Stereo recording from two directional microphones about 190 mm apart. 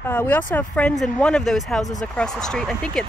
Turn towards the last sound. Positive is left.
turn(degrees=5)  # may be behind; listen again after turning